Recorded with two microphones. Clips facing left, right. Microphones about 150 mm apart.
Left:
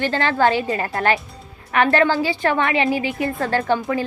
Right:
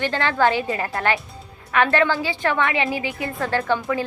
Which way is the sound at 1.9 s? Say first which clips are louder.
Left 3 dB; 45° left (ahead or behind).